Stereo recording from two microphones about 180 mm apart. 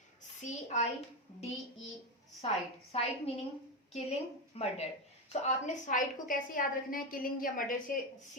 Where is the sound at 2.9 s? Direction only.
35° left (ahead or behind).